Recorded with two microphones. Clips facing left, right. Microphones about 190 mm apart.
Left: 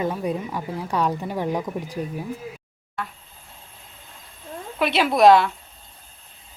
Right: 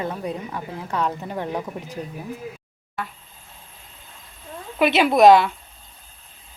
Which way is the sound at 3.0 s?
Centre (ahead or behind).